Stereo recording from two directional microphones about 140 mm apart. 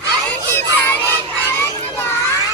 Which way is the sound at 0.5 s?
15° left (ahead or behind).